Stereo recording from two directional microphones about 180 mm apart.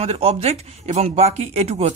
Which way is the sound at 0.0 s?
35° right (ahead or behind).